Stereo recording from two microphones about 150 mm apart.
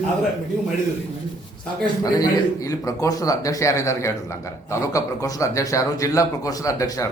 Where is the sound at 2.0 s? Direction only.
25° left (ahead or behind).